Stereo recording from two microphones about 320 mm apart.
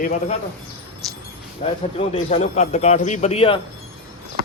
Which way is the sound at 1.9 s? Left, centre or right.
Left.